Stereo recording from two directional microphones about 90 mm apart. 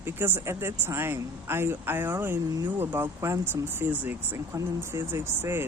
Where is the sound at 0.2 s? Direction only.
25° right (ahead or behind).